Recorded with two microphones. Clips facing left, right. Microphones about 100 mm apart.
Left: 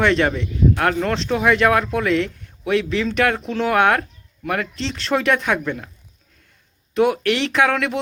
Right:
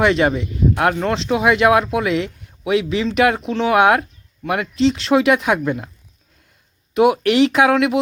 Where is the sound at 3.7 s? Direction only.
15° right (ahead or behind).